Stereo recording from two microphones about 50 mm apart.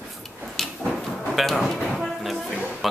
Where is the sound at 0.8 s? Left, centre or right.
Right.